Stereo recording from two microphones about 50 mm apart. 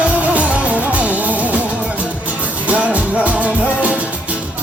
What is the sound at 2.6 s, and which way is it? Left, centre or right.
Music, right.